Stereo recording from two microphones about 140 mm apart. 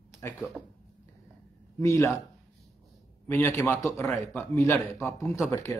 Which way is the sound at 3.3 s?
20° left (ahead or behind).